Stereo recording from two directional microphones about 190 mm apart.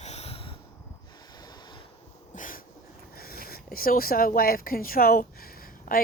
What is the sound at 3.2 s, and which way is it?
Speech, 50° left (ahead or behind).